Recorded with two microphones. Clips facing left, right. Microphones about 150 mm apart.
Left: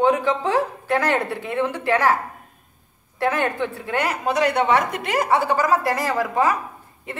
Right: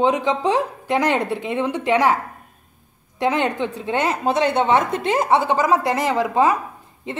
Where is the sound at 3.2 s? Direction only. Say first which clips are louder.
Right 2 dB; 20° right (ahead or behind).